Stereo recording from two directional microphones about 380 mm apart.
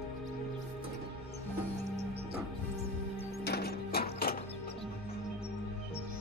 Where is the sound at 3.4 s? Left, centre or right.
Left.